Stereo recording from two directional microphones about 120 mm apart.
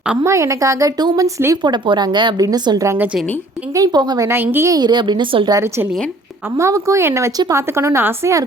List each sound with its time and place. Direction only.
0.2 s a woman's voice: 25° right (ahead or behind)
1.6 s a woman's voice: 40° right (ahead or behind)
4.3 s a woman's voice: 20° right (ahead or behind)
4.7 s a woman's voice: 35° right (ahead or behind)
5.5 s a woman's voice: 20° right (ahead or behind)